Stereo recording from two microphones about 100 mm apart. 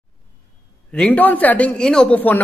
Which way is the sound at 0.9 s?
15° left (ahead or behind).